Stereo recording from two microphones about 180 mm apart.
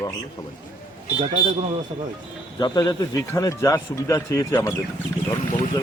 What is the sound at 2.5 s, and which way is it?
Speech, 20° left (ahead or behind).